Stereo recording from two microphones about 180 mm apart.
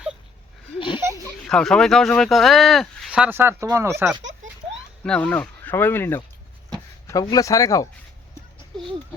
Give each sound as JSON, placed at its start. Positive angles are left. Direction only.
{"t": 0.8, "sound": "a sound", "side_deg": 25}
{"t": 1.5, "sound": "speech", "side_deg": 5}
{"t": 5.0, "sound": "speech", "side_deg": 5}